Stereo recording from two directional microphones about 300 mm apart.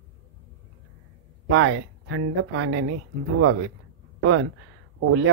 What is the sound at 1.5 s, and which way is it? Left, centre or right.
Speech, right.